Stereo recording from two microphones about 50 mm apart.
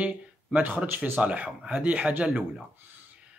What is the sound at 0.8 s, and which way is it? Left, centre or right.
Speech, right.